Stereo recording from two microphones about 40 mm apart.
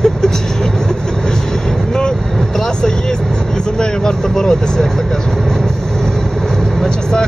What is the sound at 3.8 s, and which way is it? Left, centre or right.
Speech, centre.